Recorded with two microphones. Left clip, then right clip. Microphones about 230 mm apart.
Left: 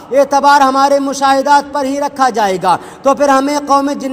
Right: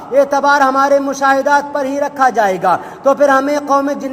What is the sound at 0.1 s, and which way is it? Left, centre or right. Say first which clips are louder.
Speech: left 3 dB; left.